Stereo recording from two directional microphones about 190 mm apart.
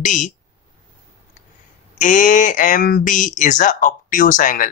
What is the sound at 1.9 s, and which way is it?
Speech, 40° left (ahead or behind).